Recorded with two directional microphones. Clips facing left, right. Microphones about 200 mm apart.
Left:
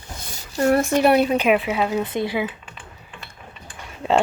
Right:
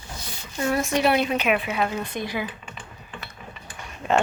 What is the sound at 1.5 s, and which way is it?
Speech, 20° left (ahead or behind).